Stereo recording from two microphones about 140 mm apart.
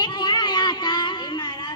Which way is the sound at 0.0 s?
30° left (ahead or behind).